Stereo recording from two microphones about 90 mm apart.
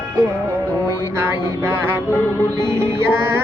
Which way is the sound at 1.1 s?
25° right (ahead or behind).